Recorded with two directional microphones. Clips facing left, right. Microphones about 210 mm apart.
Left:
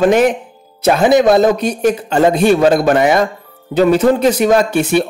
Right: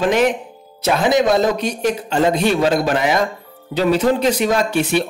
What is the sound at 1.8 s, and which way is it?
Speech, 50° left (ahead or behind).